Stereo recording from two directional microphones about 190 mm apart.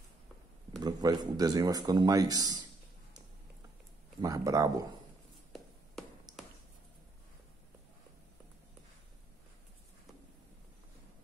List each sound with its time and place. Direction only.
0.7 s speech: 20° right (ahead or behind)
4.2 s speech: 15° right (ahead or behind)
6.3 s a sound: 20° right (ahead or behind)